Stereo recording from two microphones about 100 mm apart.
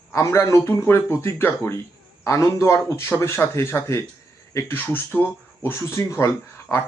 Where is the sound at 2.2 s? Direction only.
30° left (ahead or behind).